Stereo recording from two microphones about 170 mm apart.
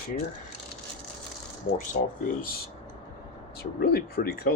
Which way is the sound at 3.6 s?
65° left (ahead or behind).